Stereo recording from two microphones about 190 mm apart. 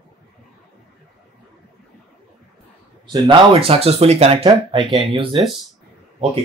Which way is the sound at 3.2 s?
30° right (ahead or behind).